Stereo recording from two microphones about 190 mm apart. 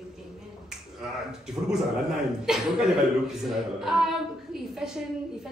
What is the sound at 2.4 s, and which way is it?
A woman's voice, centre (ahead or behind).